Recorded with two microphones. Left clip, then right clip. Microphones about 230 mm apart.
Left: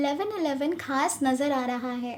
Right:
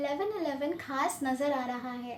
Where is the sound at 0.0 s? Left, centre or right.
Left.